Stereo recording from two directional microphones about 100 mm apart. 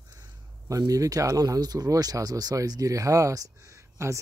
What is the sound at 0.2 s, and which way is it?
Speech, 35° right (ahead or behind).